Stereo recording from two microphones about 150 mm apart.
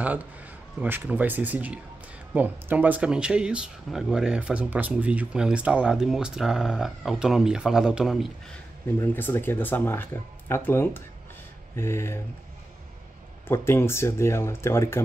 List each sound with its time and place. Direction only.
0.0 s speech: 10° right (ahead or behind)
8.8 s speech: 15° left (ahead or behind)
13.5 s speech: 15° left (ahead or behind)